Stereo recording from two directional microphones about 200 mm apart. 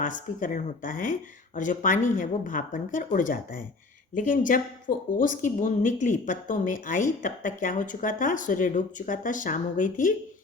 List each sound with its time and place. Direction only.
0.0 s speech: 40° left (ahead or behind)